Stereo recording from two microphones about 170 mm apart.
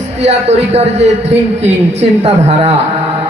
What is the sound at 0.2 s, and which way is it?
A man's voice, 40° right (ahead or behind).